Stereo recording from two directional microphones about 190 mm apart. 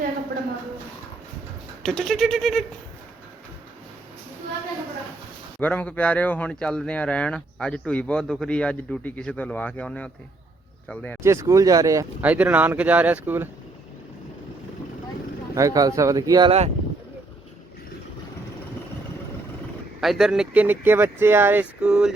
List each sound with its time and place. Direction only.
1.8 s speech: centre (ahead or behind)
5.5 s speech: 10° left (ahead or behind)
11.2 s speech: 15° right (ahead or behind)
15.5 s speech: 15° right (ahead or behind)
16.5 s speech: 35° right (ahead or behind)
20.0 s speech: centre (ahead or behind)